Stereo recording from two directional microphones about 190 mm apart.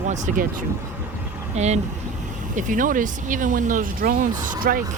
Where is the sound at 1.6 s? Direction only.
35° right (ahead or behind).